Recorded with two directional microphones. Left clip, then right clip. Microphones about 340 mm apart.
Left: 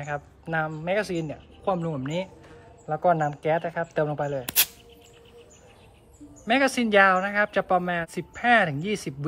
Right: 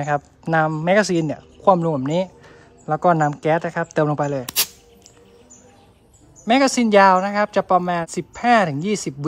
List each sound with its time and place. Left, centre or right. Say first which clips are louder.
0.0 s speech: right 10 dB; centre
6.4 s speech: right 6 dB; centre